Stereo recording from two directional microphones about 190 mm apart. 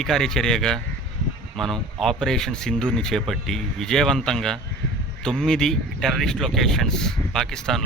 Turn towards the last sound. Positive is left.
turn(degrees=5)  # may be behind; listen again after turning